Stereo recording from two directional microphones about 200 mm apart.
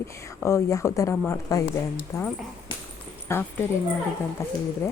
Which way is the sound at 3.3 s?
15° left (ahead or behind).